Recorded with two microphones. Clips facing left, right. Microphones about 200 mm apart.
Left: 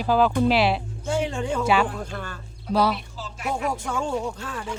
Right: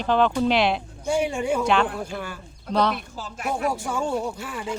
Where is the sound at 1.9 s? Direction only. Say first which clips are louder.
Right 2 dB; 10° right (ahead or behind).